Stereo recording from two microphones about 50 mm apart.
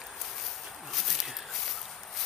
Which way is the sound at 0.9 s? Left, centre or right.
Centre.